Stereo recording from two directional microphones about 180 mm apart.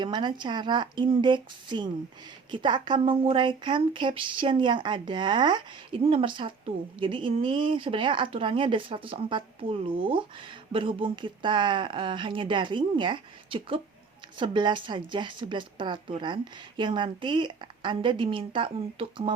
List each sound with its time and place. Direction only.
0.0 s speech: 25° right (ahead or behind)